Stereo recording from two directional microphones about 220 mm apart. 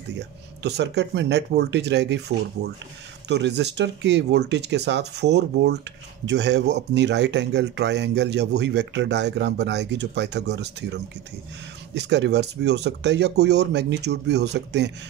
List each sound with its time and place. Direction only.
0.1 s speech: 50° right (ahead or behind)